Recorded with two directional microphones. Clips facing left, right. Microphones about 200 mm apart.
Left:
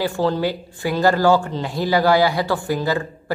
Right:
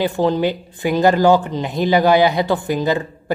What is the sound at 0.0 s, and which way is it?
Speech, 20° right (ahead or behind).